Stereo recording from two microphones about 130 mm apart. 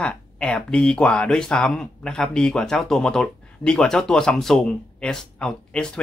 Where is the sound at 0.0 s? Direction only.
10° left (ahead or behind).